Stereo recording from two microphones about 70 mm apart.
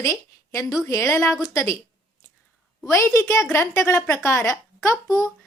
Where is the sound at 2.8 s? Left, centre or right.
Left.